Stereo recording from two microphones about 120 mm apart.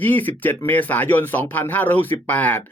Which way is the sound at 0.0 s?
15° left (ahead or behind).